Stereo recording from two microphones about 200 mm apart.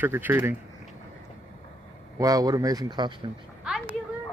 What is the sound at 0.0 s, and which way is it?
Speech, 10° right (ahead or behind).